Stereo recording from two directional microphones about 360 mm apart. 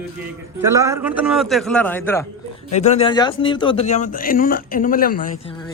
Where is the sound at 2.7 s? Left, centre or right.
Centre.